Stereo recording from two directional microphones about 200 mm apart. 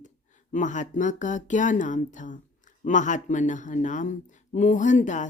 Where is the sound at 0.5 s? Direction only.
40° left (ahead or behind).